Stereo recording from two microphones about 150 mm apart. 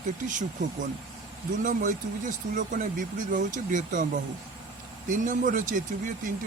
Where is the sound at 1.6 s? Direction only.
60° right (ahead or behind).